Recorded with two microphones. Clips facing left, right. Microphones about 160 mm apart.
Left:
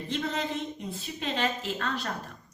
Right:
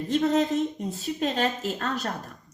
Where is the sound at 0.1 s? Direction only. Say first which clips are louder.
Right 9 dB; 40° right (ahead or behind).